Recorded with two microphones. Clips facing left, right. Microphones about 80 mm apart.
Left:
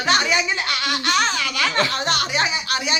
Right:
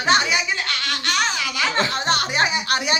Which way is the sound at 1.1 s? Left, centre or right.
Centre.